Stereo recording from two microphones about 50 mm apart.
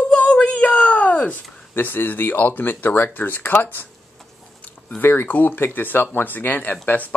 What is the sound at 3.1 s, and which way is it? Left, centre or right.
Speech, left.